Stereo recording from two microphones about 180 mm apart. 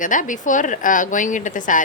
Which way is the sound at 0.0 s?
45° left (ahead or behind).